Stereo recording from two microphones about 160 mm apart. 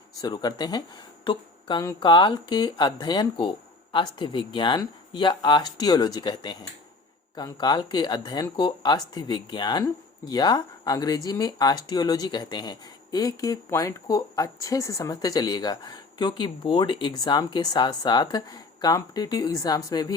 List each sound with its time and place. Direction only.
0.1 s speech: 25° left (ahead or behind)